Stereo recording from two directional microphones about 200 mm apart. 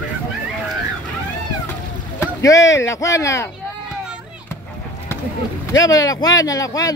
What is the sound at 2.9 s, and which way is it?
Speech, 15° left (ahead or behind).